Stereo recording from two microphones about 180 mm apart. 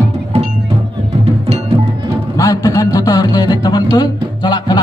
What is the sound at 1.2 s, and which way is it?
Music, 35° right (ahead or behind).